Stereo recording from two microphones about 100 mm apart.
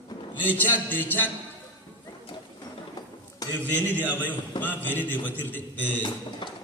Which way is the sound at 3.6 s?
20° right (ahead or behind).